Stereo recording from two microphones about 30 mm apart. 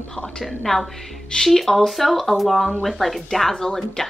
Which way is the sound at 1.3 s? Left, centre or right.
Centre.